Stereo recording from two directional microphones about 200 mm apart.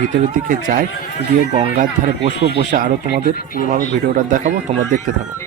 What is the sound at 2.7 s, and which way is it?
Speech, 45° right (ahead or behind).